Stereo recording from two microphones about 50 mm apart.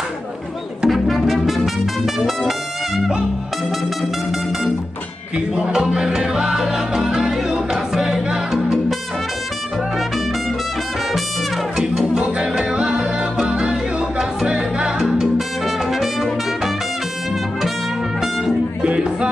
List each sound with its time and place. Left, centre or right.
0.8 s music: centre
5.6 s music: centre
12.1 s music: centre
15.0 s music: centre
18.8 s music: centre